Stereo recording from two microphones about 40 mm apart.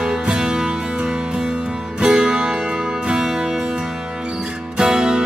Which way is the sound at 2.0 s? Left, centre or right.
Right.